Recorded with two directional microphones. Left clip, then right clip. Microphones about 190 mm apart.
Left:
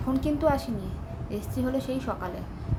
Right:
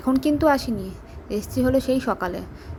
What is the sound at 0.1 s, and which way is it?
A woman's voice, 45° right (ahead or behind).